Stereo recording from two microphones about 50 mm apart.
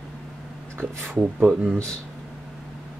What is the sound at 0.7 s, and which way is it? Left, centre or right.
Speech, right.